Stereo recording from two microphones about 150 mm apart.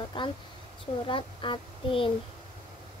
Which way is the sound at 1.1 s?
35° left (ahead or behind).